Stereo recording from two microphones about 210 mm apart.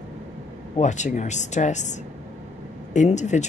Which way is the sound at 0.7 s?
35° left (ahead or behind).